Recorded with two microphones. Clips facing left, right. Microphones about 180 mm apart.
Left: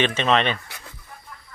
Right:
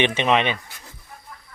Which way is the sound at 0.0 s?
15° right (ahead or behind).